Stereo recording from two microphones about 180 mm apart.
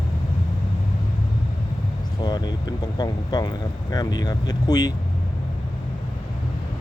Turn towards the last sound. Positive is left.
turn(degrees=20)  # may be behind; listen again after turning